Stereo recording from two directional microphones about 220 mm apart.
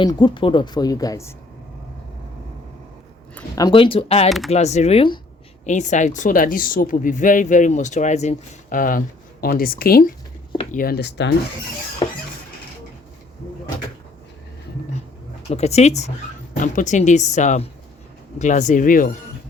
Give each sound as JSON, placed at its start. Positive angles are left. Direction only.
{"t": 0.0, "sound": "speech", "side_deg": 20}
{"t": 3.3, "sound": "speech", "side_deg": 15}
{"t": 4.3, "sound": "speech", "side_deg": 0}
{"t": 4.5, "sound": "speech", "side_deg": 30}
{"t": 12.0, "sound": "a sound", "side_deg": 20}
{"t": 15.4, "sound": "speech", "side_deg": 30}